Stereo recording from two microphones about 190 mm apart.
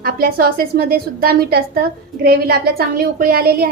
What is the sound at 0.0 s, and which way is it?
A woman's voice, 50° right (ahead or behind).